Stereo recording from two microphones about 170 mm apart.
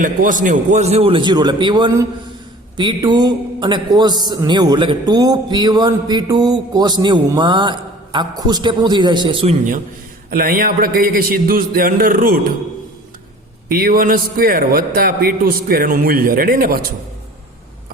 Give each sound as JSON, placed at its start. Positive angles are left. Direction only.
{"t": 0.0, "sound": "a man's voice", "side_deg": -50}
{"t": 10.2, "sound": "a man's voice", "side_deg": -60}
{"t": 13.7, "sound": "a man's voice", "side_deg": -60}